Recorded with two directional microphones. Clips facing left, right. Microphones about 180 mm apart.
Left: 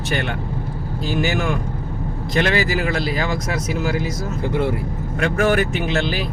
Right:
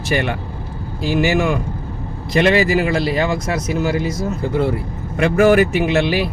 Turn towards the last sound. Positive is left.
turn(degrees=-5)  # may be behind; listen again after turning